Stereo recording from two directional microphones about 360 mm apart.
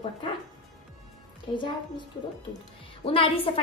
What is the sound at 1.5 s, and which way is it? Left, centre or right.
Speech, centre.